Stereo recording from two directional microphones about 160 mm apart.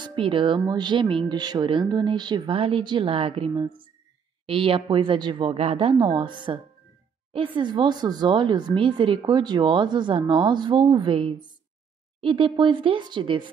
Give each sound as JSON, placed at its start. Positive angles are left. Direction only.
{"t": 0.0, "sound": "speech", "side_deg": -35}